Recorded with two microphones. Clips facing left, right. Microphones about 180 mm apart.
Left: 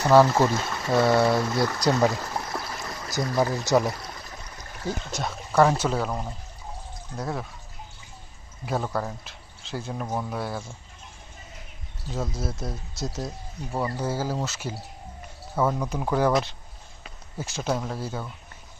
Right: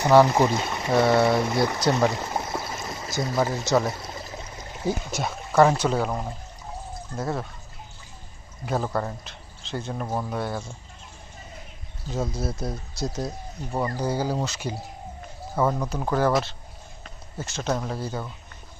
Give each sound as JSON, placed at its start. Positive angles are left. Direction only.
{"t": 0.2, "sound": "speech", "side_deg": -15}
{"t": 1.9, "sound": "a sound", "side_deg": -20}
{"t": 3.4, "sound": "speech", "side_deg": -20}
{"t": 8.6, "sound": "speech", "side_deg": 0}
{"t": 12.1, "sound": "speech", "side_deg": 0}